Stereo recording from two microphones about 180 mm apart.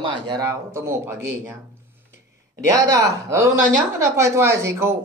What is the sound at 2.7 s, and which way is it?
Speech, 15° right (ahead or behind).